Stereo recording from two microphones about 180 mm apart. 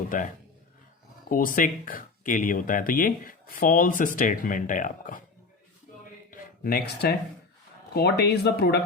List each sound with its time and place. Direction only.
0.1 s speech: 50° left (ahead or behind)
1.3 s speech: 50° left (ahead or behind)
6.7 s speech: 60° left (ahead or behind)